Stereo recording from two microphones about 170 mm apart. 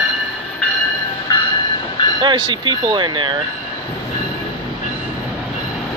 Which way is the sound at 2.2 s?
25° right (ahead or behind).